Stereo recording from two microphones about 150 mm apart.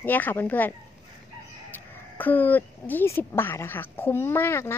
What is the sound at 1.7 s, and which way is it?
A woman's voice, 10° left (ahead or behind).